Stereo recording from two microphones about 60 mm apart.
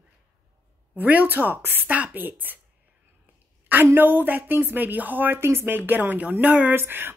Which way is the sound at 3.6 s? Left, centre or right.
Right.